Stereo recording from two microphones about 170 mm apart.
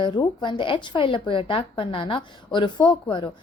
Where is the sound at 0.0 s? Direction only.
25° left (ahead or behind).